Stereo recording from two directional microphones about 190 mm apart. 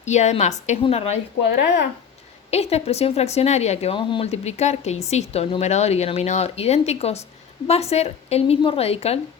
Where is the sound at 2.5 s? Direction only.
35° left (ahead or behind).